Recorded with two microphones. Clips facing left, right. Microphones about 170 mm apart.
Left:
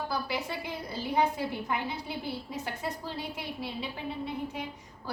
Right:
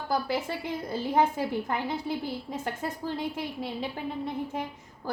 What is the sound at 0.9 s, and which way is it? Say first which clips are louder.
A woman's voice: right 3 dB; 50° right (ahead or behind).